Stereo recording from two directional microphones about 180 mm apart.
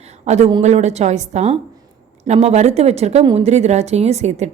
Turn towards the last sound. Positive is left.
turn(degrees=-40)  # may be behind; listen again after turning